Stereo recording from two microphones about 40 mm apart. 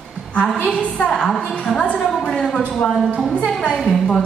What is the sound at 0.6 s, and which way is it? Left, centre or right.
Speech, left.